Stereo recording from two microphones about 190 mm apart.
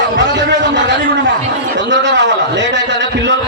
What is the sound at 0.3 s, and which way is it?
A man's voice, 70° right (ahead or behind).